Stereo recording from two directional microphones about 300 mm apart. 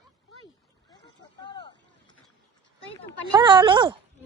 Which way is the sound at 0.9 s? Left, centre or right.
Centre.